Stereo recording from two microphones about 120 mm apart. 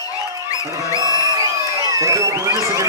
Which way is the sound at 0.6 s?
25° right (ahead or behind).